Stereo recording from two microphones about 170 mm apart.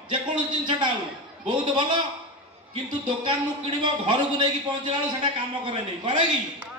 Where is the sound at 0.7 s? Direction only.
25° right (ahead or behind).